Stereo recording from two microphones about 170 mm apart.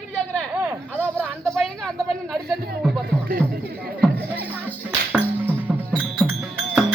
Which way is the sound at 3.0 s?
70° right (ahead or behind).